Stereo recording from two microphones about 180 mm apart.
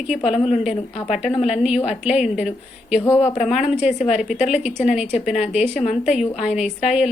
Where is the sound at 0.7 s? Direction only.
30° left (ahead or behind).